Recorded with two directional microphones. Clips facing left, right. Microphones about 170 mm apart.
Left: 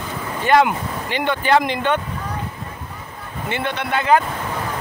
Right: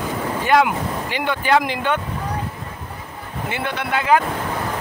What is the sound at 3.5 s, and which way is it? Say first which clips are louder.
Speech: left 1 dB; 5° right (ahead or behind).